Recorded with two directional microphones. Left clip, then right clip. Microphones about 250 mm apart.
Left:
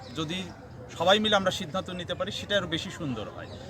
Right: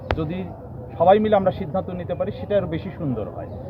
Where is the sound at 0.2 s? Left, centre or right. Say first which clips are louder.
Right 5 dB; left.